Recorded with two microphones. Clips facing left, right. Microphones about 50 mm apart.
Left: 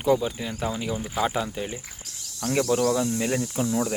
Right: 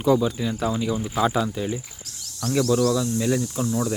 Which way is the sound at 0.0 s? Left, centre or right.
Centre.